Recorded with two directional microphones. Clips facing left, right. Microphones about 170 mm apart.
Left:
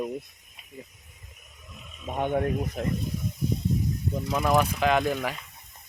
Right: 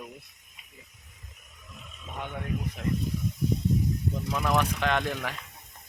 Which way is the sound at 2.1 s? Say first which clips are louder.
Left 9 dB; 50° left (ahead or behind).